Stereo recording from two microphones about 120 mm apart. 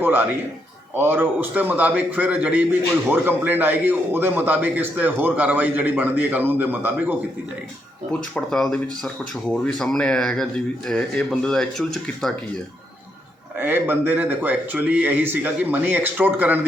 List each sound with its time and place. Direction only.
0.0 s a sound: 15° right (ahead or behind)
0.9 s a man's voice: 15° right (ahead or behind)
8.4 s speech: 5° left (ahead or behind)
13.6 s a man's voice: 15° right (ahead or behind)